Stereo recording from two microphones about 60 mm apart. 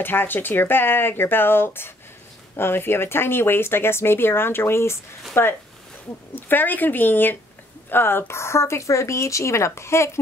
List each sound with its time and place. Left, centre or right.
0.0 s speech: left